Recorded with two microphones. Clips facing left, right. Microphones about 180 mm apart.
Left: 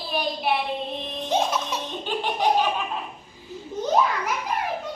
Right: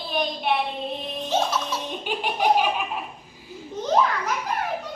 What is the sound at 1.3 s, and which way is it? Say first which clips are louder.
Baby laughter: left 1 dB; 15° left (ahead or behind).